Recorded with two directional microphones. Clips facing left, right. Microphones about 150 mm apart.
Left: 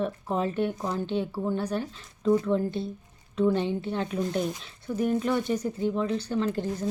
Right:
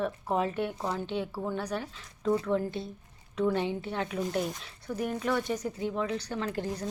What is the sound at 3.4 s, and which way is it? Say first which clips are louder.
Speech: left 4 dB; 30° left (ahead or behind).